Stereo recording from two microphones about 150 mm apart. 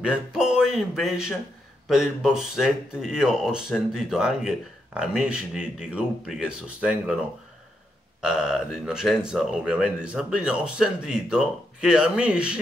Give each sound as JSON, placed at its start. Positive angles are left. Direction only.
{"t": 0.0, "sound": "speech", "side_deg": -5}
{"t": 8.2, "sound": "speech", "side_deg": -5}